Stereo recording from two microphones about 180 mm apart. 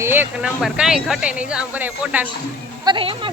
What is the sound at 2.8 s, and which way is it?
Speech, 30° right (ahead or behind).